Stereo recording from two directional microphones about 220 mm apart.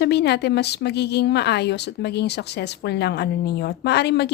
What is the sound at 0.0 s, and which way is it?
A woman's voice, 50° left (ahead or behind).